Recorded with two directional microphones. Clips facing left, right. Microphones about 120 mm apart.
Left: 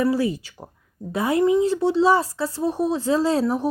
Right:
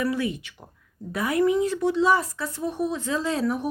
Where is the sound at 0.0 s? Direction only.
30° left (ahead or behind).